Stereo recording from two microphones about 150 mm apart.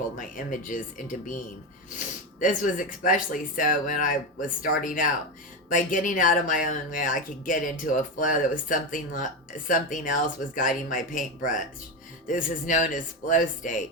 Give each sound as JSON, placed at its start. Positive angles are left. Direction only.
{"t": 0.2, "sound": "speech", "side_deg": 65}
{"t": 2.4, "sound": "speech", "side_deg": 60}